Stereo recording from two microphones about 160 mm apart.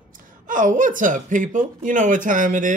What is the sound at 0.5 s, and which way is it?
Speech, 55° right (ahead or behind).